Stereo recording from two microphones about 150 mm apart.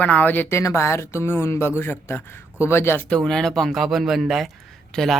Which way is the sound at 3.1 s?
5° left (ahead or behind).